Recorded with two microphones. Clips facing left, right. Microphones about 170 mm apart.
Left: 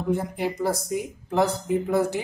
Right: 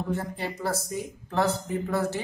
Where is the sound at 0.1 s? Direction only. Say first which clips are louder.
Left 5 dB; 15° left (ahead or behind).